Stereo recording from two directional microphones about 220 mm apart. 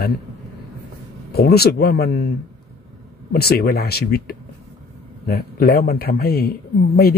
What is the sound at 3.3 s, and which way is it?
Speech, 45° left (ahead or behind).